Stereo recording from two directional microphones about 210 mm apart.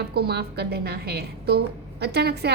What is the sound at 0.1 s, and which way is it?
A woman's voice, 50° right (ahead or behind).